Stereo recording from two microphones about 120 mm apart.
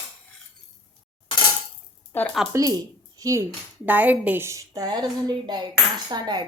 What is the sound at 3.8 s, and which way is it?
A woman's voice, 15° right (ahead or behind).